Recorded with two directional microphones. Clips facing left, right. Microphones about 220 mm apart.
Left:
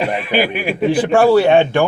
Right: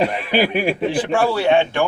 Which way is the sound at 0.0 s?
35° right (ahead or behind).